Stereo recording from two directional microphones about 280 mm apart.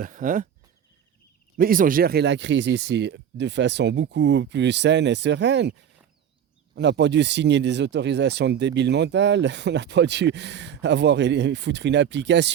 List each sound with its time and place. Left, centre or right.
0.0 s speech: right
1.5 s speech: right